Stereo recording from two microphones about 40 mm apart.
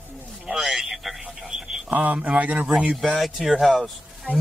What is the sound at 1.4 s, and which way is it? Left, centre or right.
Radio, centre.